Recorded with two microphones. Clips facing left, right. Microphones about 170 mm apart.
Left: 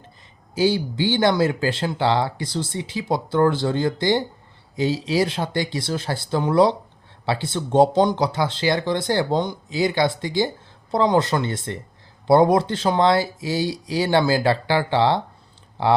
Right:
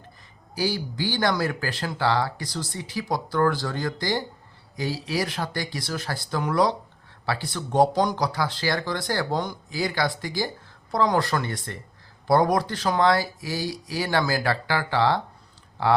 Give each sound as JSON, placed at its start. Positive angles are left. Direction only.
{"t": 0.5, "sound": "speech", "side_deg": 25}